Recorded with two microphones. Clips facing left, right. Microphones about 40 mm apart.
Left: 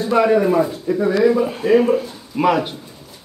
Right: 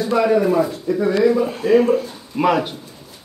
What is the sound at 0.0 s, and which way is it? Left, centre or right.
Speech, centre.